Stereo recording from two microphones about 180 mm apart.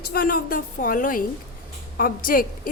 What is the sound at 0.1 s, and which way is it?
A woman's voice, 55° left (ahead or behind).